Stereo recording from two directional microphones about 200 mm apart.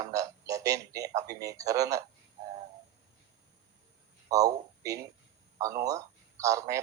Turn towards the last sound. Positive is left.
turn(degrees=-15)  # may be behind; listen again after turning